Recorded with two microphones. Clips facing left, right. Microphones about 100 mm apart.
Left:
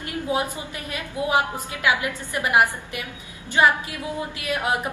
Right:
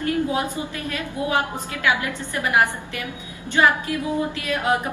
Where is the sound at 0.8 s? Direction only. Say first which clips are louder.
Left 1 dB; 20° left (ahead or behind).